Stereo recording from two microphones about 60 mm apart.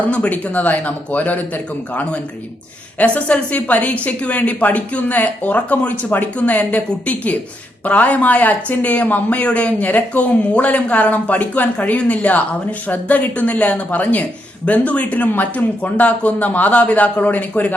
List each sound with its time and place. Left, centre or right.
0.0 s speech: left
3.0 s speech: left